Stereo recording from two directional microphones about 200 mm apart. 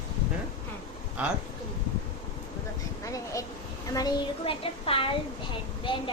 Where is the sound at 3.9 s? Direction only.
25° left (ahead or behind).